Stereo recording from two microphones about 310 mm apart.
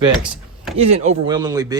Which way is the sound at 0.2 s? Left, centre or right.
Centre.